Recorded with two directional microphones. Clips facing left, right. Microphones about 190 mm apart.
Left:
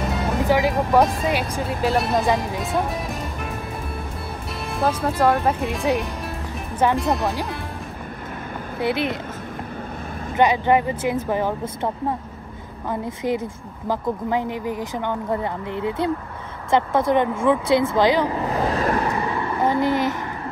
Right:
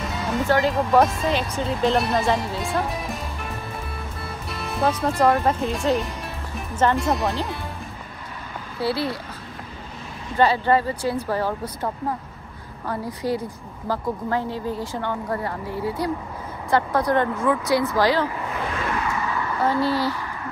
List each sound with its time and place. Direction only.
0.5 s speech: 10° left (ahead or behind)
0.9 s speech: centre (ahead or behind)
4.5 s speech: centre (ahead or behind)
5.9 s music: centre (ahead or behind)
7.0 s speech: centre (ahead or behind)
8.7 s a woman's voice: 20° left (ahead or behind)
10.3 s speech: 15° left (ahead or behind)
12.8 s a woman's voice: 20° left (ahead or behind)
18.5 s a sound: 35° left (ahead or behind); by 20.2 s 20° left (ahead or behind)